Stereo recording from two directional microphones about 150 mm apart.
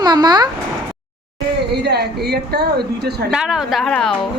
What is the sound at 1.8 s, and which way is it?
A woman's voice, 90° right.